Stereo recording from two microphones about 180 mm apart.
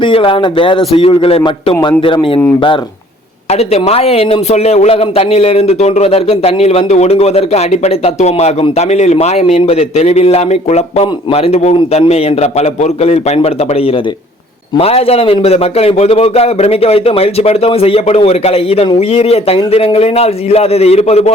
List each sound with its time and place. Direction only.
0.0 s a man's voice: 30° left (ahead or behind)
3.5 s a man's voice: 35° left (ahead or behind)